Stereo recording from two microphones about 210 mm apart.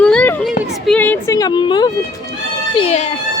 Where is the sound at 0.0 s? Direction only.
5° left (ahead or behind).